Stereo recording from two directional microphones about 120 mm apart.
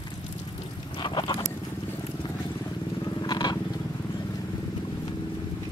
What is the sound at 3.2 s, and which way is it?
Vehicle, 40° left (ahead or behind).